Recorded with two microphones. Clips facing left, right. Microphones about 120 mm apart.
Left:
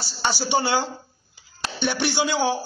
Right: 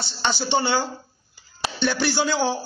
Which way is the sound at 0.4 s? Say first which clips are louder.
Even; 15° left (ahead or behind).